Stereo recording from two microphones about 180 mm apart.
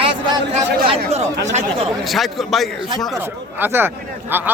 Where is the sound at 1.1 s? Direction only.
40° right (ahead or behind).